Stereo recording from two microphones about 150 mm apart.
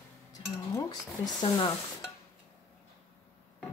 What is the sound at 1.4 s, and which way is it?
Stir, 30° left (ahead or behind).